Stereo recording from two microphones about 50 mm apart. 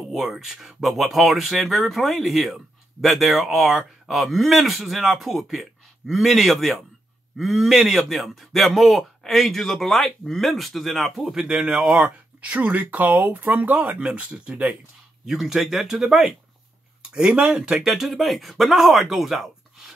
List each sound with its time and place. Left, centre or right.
0.1 s speech: centre
11.6 s speech: right
15.2 s speech: centre
17.1 s speech: centre